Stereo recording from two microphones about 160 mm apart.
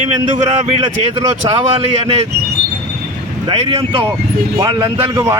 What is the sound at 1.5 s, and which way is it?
Speech, 35° right (ahead or behind).